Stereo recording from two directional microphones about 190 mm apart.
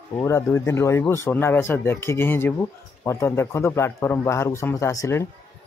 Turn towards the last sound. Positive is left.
turn(degrees=15)  # may be behind; listen again after turning